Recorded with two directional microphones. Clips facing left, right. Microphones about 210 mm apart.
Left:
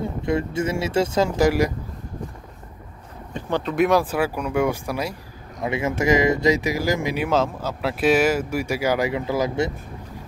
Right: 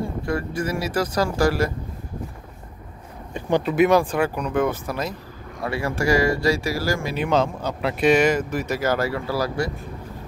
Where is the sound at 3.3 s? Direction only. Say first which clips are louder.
Right 3 dB; 10° right (ahead or behind); by 7.2 s 20° left (ahead or behind).